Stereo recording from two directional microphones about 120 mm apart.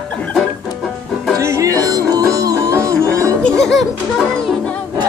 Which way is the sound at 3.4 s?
5° left (ahead or behind).